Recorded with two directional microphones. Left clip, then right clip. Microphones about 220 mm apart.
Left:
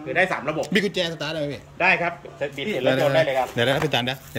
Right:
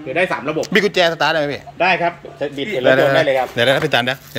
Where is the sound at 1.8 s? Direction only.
40° right (ahead or behind).